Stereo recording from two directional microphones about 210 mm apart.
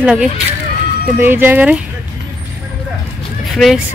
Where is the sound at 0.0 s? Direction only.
5° right (ahead or behind).